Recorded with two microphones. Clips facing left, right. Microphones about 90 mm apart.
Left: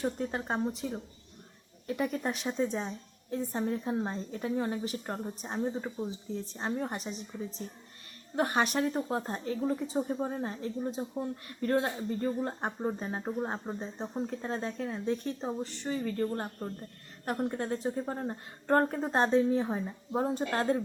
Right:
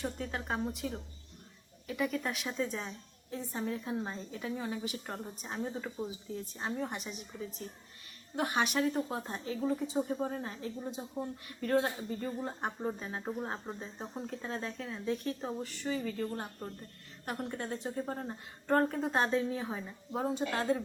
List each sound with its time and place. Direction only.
0.0 s a woman's voice: 35° left (ahead or behind)
1.9 s a woman's voice: 40° left (ahead or behind)
4.3 s a woman's voice: 45° left (ahead or behind)
13.2 s a woman's voice: 20° left (ahead or behind)
15.9 s a woman's voice: 40° left (ahead or behind)
20.3 s a woman's voice: 40° left (ahead or behind)